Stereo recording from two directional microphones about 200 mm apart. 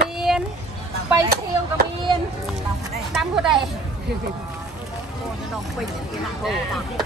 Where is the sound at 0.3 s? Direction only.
Centre (ahead or behind).